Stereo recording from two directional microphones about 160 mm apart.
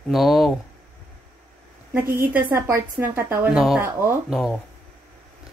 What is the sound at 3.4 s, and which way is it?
Speech, 5° right (ahead or behind).